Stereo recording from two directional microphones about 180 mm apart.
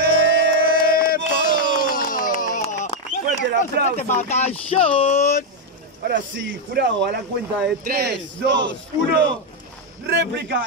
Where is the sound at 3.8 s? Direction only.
60° right (ahead or behind).